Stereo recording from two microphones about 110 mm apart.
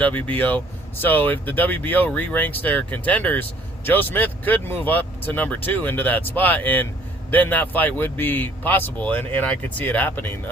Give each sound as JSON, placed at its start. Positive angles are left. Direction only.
{"t": 0.0, "sound": "speech", "side_deg": 15}